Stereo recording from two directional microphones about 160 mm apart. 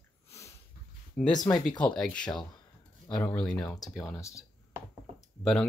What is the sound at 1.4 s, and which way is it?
Speech, 25° left (ahead or behind).